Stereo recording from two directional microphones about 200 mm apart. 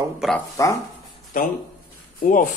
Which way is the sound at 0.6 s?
15° left (ahead or behind).